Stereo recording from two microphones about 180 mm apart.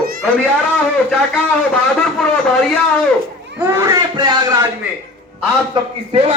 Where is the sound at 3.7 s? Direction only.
20° right (ahead or behind).